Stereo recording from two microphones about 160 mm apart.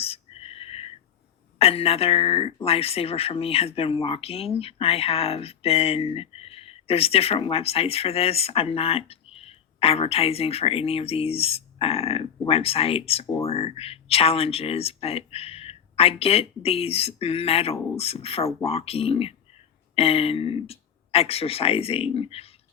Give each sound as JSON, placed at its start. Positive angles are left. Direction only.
{"t": 0.0, "sound": "whispering", "side_deg": 40}
{"t": 1.5, "sound": "speech", "side_deg": 40}